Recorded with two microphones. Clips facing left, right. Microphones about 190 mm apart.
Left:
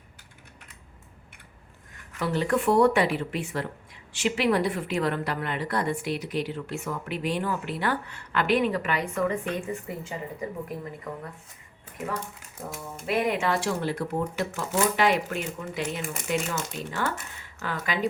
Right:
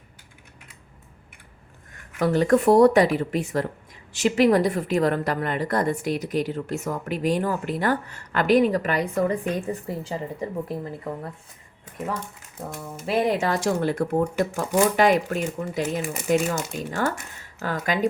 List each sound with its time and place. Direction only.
2.1 s a woman's voice: 45° right (ahead or behind)
13.1 s a woman's voice: 35° right (ahead or behind)